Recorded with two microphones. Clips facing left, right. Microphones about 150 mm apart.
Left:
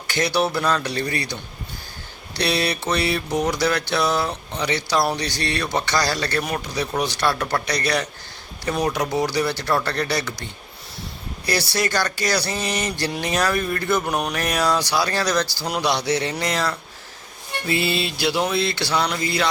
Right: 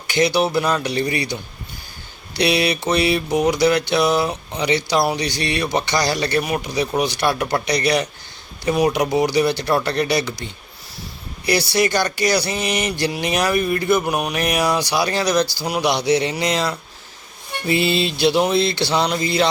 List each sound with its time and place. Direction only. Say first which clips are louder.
0.1 s mantra: right 4 dB; 15° right (ahead or behind)
14.3 s mantra: right 2 dB; 15° right (ahead or behind)
17.7 s a sound: right 4 dB; 20° right (ahead or behind)